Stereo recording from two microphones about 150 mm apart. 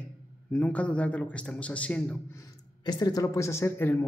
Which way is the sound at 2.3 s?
25° left (ahead or behind).